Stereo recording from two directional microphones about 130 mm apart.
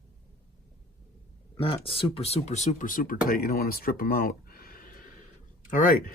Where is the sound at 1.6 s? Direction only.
45° left (ahead or behind); by 3.2 s 90° left.